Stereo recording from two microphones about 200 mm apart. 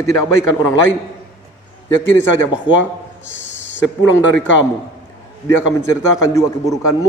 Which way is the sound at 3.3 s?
65° left (ahead or behind).